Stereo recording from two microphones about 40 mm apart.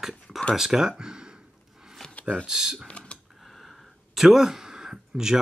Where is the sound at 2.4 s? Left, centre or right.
Centre.